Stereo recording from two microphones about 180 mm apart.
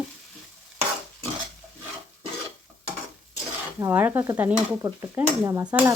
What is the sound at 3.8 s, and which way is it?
Stir, 10° right (ahead or behind).